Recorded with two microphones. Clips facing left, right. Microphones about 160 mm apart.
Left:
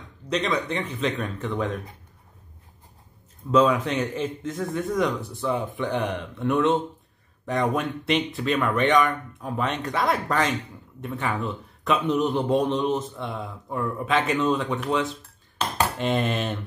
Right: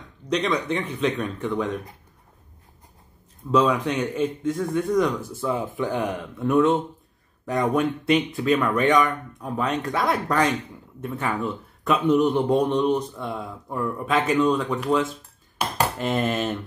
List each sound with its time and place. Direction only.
0.2 s a sound: 5° left (ahead or behind)
0.7 s a man's voice: centre (ahead or behind)
3.5 s a man's voice: centre (ahead or behind)
15.5 s cutlery: 10° right (ahead or behind)
16.1 s a man's voice: centre (ahead or behind)